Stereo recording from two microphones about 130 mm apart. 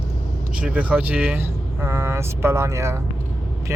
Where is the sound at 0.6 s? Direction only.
10° right (ahead or behind).